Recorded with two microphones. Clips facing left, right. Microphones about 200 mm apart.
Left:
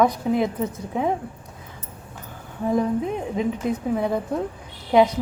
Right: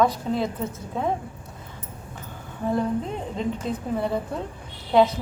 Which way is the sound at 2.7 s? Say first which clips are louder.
Left 3 dB; 10° left (ahead or behind).